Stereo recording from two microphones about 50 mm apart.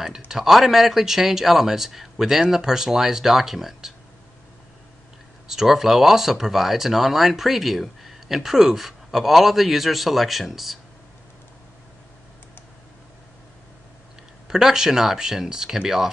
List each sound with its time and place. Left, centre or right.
0.3 s a man's voice: centre
5.5 s speech: centre
14.5 s a man's voice: centre